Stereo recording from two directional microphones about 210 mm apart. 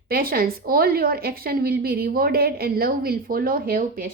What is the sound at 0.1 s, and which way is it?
A woman's voice, 45° right (ahead or behind).